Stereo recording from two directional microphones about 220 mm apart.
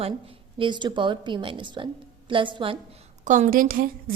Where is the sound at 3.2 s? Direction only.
35° right (ahead or behind).